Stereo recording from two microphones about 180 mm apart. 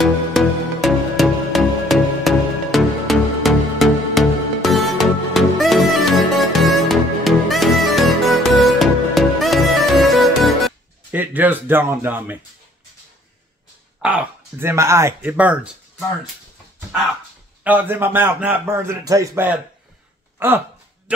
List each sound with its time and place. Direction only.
0.0 s music: centre (ahead or behind)
11.1 s a sound: 10° right (ahead or behind)
14.0 s speech: 10° right (ahead or behind)
17.6 s speech: 10° right (ahead or behind)